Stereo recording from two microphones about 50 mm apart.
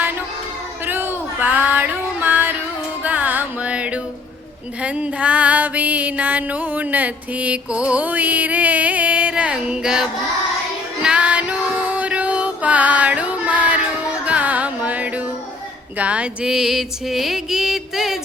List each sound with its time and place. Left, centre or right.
0.9 s female singing: right
3.0 s music: right
8.0 s music: right; by 10.1 s centre
11.0 s female singing: right
14.3 s music: right
16.5 s a sound: centre